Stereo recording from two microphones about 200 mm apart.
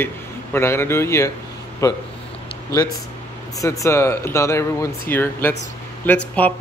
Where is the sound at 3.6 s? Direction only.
15° left (ahead or behind).